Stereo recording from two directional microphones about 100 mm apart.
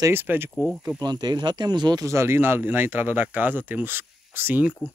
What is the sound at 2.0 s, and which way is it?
Speech, 25° right (ahead or behind).